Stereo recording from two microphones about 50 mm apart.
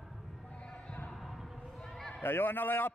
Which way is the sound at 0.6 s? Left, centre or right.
Centre.